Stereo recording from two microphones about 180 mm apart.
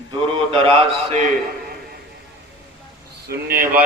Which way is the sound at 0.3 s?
30° right (ahead or behind).